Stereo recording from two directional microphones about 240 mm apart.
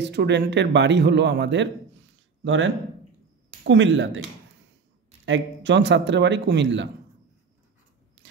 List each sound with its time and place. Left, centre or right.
0.0 s speech: right
5.2 s speech: right